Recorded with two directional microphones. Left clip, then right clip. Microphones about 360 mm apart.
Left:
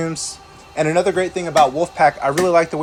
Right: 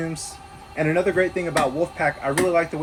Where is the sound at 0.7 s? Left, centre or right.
Centre.